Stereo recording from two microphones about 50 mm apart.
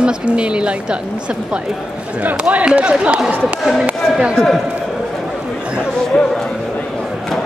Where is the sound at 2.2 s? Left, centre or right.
Right.